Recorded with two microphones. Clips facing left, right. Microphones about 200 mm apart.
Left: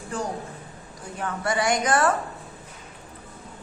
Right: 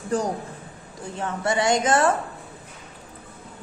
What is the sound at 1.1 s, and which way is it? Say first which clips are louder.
A woman's voice: right 2 dB; 25° right (ahead or behind).